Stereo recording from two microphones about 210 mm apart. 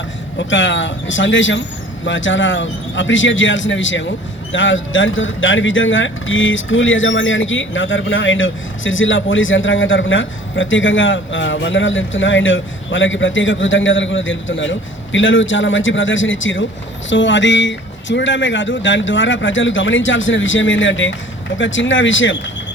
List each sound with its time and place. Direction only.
0.3 s speech: 60° left (ahead or behind)